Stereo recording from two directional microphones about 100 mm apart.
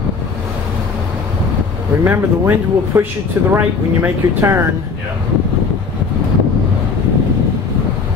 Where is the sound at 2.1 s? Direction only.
20° right (ahead or behind).